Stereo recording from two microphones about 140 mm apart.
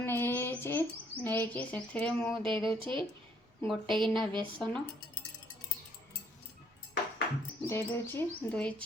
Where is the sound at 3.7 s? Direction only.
Centre (ahead or behind).